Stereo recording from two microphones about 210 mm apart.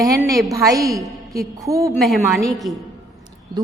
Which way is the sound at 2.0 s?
Centre (ahead or behind).